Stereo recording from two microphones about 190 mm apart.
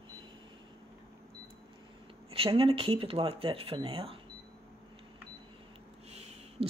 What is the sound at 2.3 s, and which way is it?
Speech, 30° right (ahead or behind).